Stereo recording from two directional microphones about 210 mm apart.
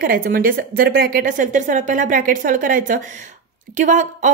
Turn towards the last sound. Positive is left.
turn(degrees=-35)  # may be behind; listen again after turning